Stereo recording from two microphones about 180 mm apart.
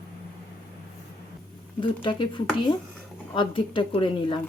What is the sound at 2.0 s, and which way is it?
Speech, 25° left (ahead or behind).